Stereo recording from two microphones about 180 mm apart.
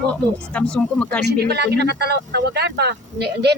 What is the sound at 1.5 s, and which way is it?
Speech, 70° right (ahead or behind).